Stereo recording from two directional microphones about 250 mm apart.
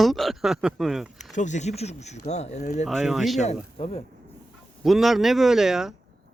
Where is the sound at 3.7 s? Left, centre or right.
Left.